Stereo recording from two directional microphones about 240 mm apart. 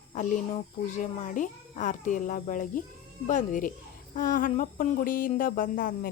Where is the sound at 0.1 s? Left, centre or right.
Left.